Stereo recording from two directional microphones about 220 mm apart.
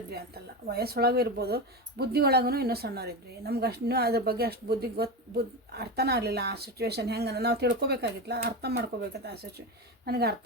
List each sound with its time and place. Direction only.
0.7 s speech: 45° right (ahead or behind)